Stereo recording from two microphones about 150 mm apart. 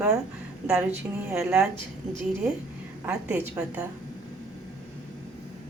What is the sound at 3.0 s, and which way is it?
Speech, 10° right (ahead or behind).